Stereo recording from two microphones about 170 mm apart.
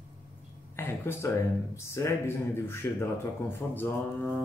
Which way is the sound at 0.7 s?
15° left (ahead or behind).